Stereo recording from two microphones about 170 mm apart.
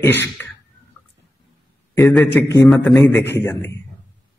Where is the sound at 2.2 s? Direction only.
15° left (ahead or behind).